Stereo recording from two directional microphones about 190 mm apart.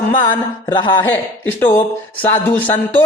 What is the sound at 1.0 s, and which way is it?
A man's voice, 10° left (ahead or behind).